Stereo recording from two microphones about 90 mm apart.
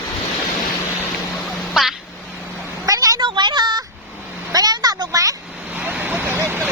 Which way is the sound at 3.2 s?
60° right (ahead or behind).